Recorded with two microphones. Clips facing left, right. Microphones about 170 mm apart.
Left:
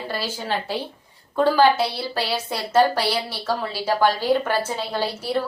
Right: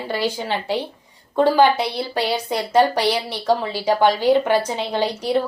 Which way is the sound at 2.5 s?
15° right (ahead or behind).